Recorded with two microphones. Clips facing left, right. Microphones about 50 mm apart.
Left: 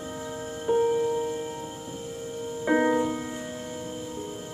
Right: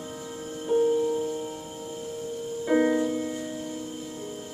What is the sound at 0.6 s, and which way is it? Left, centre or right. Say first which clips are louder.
Music: even; left.